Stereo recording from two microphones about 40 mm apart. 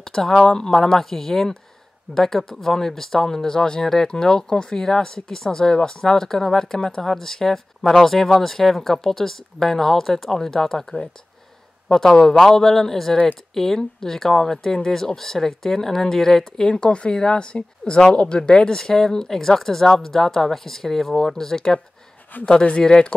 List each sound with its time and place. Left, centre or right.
0.0 s speech: centre
12.2 s speech: centre
22.6 s speech: left